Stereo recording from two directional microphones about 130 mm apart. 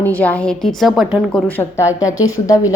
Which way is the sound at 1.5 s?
15° left (ahead or behind).